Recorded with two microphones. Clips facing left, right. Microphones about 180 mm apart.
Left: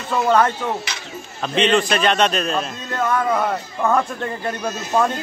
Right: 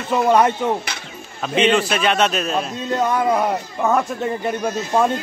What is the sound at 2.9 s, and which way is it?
Speech, 25° right (ahead or behind).